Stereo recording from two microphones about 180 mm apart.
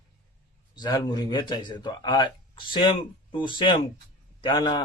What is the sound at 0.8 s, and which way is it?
A man's voice, 20° left (ahead or behind).